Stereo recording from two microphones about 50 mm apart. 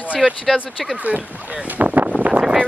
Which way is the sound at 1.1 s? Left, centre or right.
Right.